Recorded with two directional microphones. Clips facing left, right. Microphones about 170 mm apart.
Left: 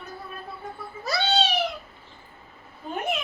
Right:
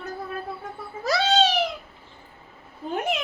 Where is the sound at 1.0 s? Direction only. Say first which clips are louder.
Right 4 dB; 90° right.